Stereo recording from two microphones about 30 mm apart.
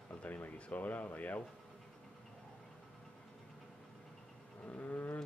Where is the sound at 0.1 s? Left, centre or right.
Left.